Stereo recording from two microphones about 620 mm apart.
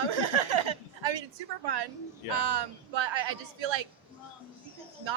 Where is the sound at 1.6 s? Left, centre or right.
Right.